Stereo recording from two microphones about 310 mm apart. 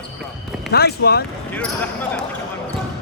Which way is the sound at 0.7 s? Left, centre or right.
Left.